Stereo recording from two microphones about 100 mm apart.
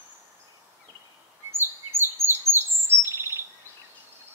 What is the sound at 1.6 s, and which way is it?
Bird vocalization, 25° right (ahead or behind).